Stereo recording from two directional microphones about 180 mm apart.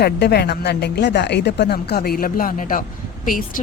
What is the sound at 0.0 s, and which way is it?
Speech, 60° left (ahead or behind).